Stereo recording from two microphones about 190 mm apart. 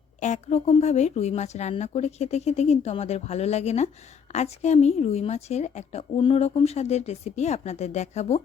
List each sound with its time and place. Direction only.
0.2 s a woman's voice: 35° left (ahead or behind)